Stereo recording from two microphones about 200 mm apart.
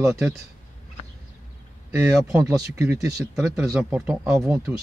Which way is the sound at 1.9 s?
5° right (ahead or behind).